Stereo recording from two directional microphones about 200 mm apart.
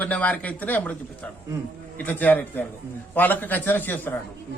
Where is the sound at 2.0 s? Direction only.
10° left (ahead or behind).